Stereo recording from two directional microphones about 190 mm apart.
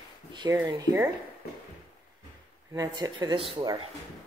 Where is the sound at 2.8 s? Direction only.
20° right (ahead or behind).